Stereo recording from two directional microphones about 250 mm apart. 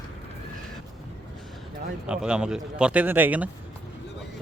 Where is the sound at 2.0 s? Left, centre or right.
Centre.